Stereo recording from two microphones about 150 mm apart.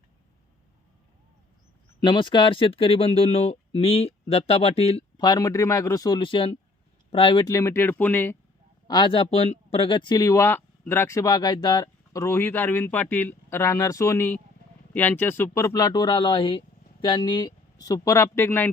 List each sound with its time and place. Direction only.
2.0 s speech: 30° left (ahead or behind)
5.2 s speech: 25° left (ahead or behind)
7.4 s speech: 20° left (ahead or behind)
8.9 s speech: 35° left (ahead or behind); by 18.7 s 15° left (ahead or behind)